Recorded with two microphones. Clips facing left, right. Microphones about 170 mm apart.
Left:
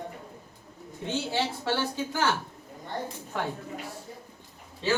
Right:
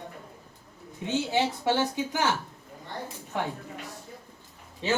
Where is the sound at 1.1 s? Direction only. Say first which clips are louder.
Right 3 dB; 15° right (ahead or behind).